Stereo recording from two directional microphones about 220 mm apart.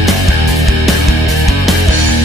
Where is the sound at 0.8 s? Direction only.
Centre (ahead or behind).